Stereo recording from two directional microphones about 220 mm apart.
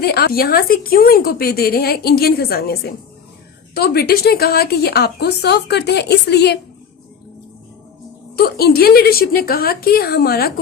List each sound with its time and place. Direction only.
0.0 s a woman's voice: 45° left (ahead or behind)
8.4 s a woman's voice: 45° left (ahead or behind)